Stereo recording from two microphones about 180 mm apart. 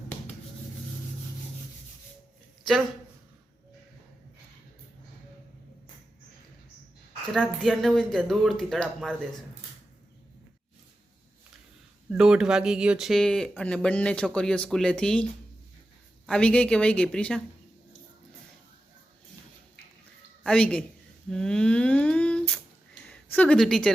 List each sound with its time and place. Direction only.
7.3 s speech: centre (ahead or behind)
12.1 s speech: 5° right (ahead or behind)
20.4 s speech: 5° left (ahead or behind)
21.2 s humming: 5° left (ahead or behind)
23.0 s speech: 5° left (ahead or behind)